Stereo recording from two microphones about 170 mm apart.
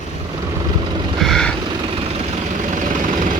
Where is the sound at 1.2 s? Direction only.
5° left (ahead or behind).